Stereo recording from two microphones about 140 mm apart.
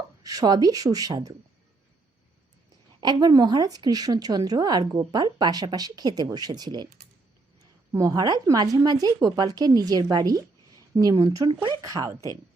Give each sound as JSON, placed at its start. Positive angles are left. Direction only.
{"t": 0.2, "sound": "a woman's voice", "side_deg": -25}
{"t": 3.0, "sound": "a woman's voice", "side_deg": -30}
{"t": 7.9, "sound": "a woman's voice", "side_deg": -25}